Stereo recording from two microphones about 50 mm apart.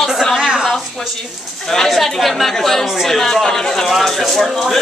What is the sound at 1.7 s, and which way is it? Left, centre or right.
Speech, centre.